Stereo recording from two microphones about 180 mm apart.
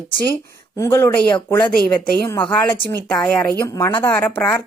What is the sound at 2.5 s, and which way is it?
Speech, 10° left (ahead or behind).